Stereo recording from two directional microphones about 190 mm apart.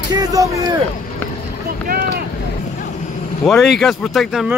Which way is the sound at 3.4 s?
Centre (ahead or behind).